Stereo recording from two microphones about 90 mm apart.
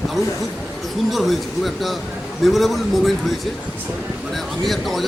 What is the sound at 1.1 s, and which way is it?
A man's voice, centre (ahead or behind).